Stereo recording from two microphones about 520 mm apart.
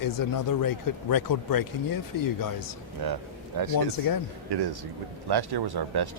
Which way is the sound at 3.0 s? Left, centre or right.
Right.